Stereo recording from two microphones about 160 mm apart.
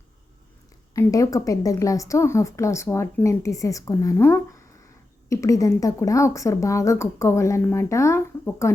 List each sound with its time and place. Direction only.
0.9 s a woman's voice: 20° left (ahead or behind)